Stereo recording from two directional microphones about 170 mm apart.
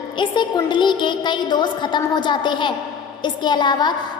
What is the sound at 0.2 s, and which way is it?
A woman's voice, 25° left (ahead or behind).